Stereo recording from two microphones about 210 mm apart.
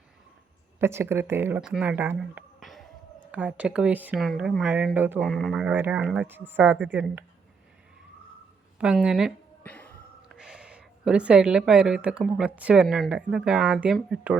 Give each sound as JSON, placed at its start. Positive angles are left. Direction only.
{"t": 0.8, "sound": "speech", "side_deg": -10}
{"t": 9.0, "sound": "a sound", "side_deg": 0}
{"t": 10.2, "sound": "a woman's voice", "side_deg": -5}